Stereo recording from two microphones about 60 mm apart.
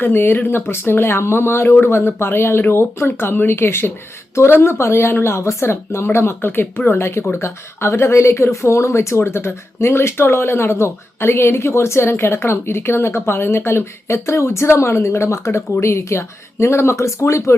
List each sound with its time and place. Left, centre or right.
0.0 s speech: left